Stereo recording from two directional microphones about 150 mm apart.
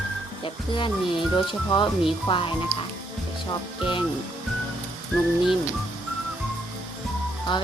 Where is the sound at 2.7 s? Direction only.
20° left (ahead or behind).